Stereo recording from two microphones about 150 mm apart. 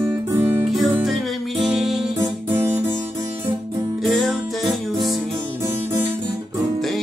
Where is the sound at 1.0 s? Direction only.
Centre (ahead or behind).